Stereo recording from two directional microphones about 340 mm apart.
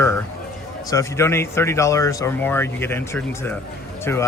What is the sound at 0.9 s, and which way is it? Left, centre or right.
Speech, centre.